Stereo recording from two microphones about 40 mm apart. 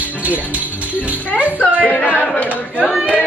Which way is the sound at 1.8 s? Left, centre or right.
Left.